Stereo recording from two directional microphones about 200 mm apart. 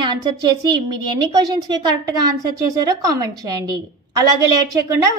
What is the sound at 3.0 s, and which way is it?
Speech, 20° right (ahead or behind).